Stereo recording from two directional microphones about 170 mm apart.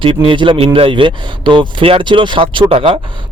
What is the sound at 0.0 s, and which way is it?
Speech, 30° right (ahead or behind).